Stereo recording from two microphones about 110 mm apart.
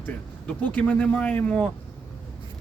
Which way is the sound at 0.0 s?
15° left (ahead or behind).